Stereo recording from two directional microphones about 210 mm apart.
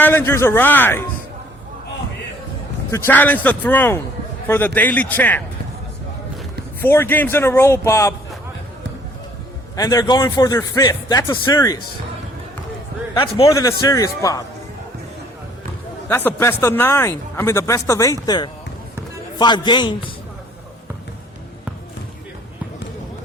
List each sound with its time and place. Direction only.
0.0 s speech: 10° left (ahead or behind)
2.9 s speech: 10° left (ahead or behind)
6.8 s speech: 10° left (ahead or behind)
9.7 s speech: 15° left (ahead or behind)
13.1 s speech: 25° left (ahead or behind)
16.0 s a man's voice: 10° left (ahead or behind)